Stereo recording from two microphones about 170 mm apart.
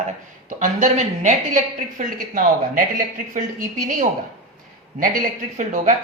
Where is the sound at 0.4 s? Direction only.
45° right (ahead or behind).